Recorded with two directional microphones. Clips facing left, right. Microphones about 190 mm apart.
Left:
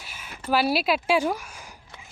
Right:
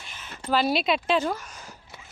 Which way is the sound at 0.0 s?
10° left (ahead or behind).